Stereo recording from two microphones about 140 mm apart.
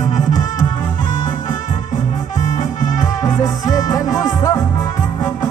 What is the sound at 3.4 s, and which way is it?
Music, 25° left (ahead or behind).